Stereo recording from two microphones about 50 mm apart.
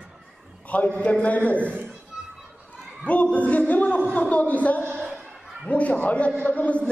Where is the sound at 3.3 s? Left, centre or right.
Left.